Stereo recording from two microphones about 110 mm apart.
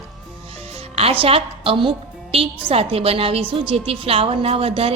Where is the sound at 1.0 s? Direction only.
60° right (ahead or behind).